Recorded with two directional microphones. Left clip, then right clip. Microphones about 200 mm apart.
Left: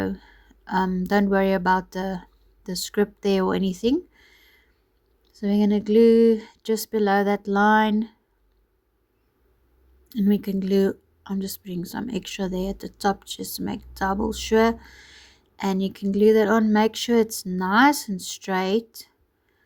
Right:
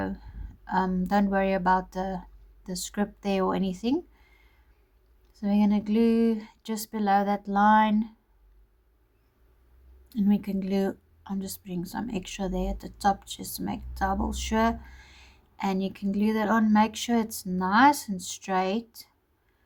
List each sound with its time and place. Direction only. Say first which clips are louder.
0.0 s a sound: left 5 dB; 30° left (ahead or behind)
1.3 s speech: left 3 dB; 30° left (ahead or behind)
10.1 s speech: left 4 dB; 30° left (ahead or behind)